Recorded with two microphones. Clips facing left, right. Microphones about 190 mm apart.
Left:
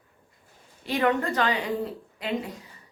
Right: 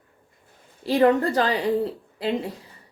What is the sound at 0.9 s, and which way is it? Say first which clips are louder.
A woman's voice: right 6 dB; 35° right (ahead or behind).